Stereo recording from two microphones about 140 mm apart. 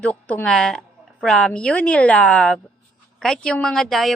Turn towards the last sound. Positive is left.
turn(degrees=0)  # may be behind; listen again after turning